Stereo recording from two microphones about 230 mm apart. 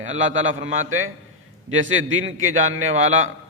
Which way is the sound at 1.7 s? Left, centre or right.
Right.